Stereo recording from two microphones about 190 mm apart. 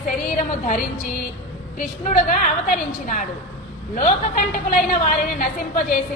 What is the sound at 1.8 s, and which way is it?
A woman's voice, 45° left (ahead or behind).